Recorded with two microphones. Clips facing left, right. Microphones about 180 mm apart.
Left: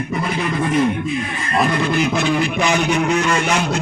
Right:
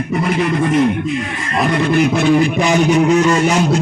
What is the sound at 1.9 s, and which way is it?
Speech, 60° right (ahead or behind).